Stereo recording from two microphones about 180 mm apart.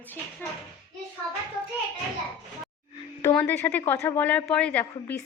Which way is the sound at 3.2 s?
15° left (ahead or behind).